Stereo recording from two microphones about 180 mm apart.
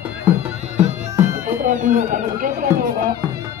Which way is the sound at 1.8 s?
45° right (ahead or behind).